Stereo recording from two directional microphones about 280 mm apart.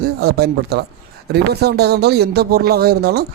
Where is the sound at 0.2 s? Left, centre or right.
Right.